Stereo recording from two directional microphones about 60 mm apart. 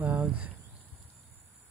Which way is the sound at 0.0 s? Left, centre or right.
Right.